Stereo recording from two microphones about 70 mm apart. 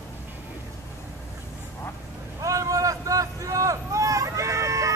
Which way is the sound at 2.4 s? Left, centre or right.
Right.